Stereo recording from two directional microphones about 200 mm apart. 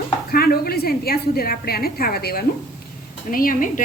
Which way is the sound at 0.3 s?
50° left (ahead or behind).